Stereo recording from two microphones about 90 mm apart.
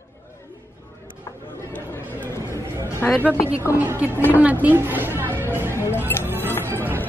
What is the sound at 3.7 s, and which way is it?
Speech, 20° right (ahead or behind).